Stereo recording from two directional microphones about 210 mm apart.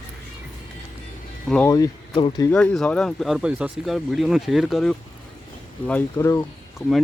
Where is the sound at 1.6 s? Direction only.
15° left (ahead or behind).